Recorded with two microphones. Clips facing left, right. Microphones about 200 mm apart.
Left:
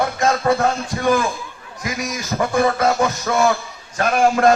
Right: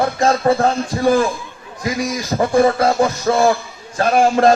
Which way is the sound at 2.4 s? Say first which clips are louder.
Right 4 dB; 30° right (ahead or behind).